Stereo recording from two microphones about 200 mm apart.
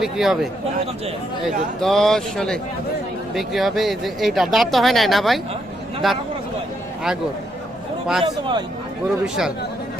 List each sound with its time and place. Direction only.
0.0 s speech: centre (ahead or behind)
1.5 s speech: centre (ahead or behind)
8.2 s speech: 20° right (ahead or behind)